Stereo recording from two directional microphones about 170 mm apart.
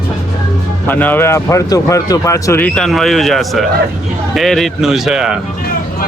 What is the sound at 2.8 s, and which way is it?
Speech, centre (ahead or behind).